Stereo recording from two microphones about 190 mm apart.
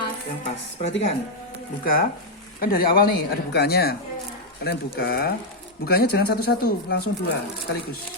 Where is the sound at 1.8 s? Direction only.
50° left (ahead or behind).